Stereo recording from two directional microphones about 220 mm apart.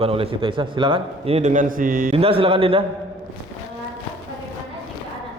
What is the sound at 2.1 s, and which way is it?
Speech, 25° right (ahead or behind).